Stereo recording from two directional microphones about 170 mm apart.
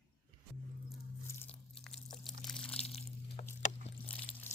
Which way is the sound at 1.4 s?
5° left (ahead or behind).